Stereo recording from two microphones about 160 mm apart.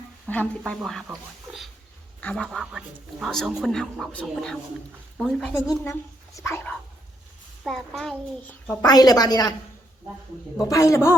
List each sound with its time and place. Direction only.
0.3 s speech: 10° left (ahead or behind)
2.2 s speech: 5° left (ahead or behind)
5.5 s speech: 15° left (ahead or behind)
7.6 s speech: centre (ahead or behind)
8.8 s a woman's voice: 25° left (ahead or behind)
10.6 s a woman's voice: 20° left (ahead or behind)